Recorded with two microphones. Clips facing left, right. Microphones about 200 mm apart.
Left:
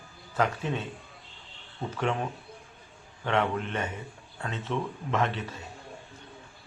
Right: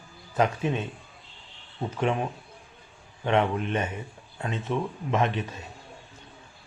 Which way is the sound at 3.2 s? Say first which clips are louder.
Right 3 dB; 15° right (ahead or behind).